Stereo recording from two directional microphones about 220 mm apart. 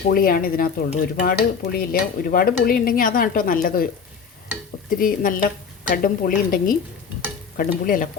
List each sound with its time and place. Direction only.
0.1 s cutlery: 40° left (ahead or behind)
4.9 s cutlery: 40° left (ahead or behind)